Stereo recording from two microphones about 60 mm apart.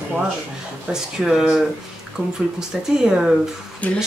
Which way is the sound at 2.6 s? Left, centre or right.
Centre.